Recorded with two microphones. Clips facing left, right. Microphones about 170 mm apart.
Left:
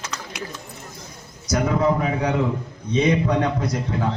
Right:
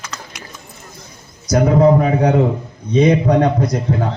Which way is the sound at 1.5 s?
40° right (ahead or behind).